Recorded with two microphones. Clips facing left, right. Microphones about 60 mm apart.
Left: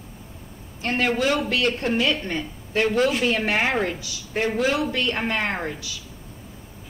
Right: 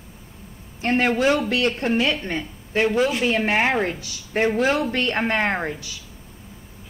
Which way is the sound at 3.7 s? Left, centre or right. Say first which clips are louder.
Right 1 dB; centre.